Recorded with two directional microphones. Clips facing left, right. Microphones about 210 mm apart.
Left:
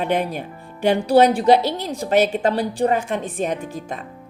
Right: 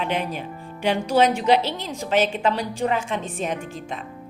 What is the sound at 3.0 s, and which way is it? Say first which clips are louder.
Speech: left 3 dB; 50° left (ahead or behind).